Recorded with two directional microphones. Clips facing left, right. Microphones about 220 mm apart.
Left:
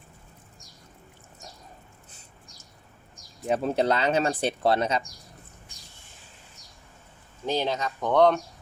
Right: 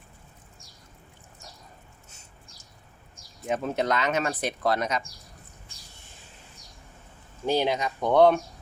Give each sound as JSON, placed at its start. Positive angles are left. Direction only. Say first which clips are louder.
{"t": 3.4, "sound": "speech", "louder": "left 3 dB", "side_deg": 35}
{"t": 7.4, "sound": "speech", "louder": "right 2 dB", "side_deg": -10}